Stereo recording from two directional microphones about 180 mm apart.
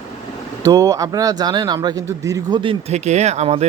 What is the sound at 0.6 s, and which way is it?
A man's voice, 20° right (ahead or behind).